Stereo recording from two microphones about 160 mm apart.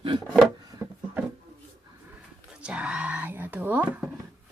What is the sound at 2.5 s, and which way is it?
Speech, 5° right (ahead or behind).